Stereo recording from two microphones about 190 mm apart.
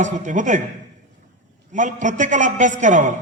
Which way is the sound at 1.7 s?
40° right (ahead or behind).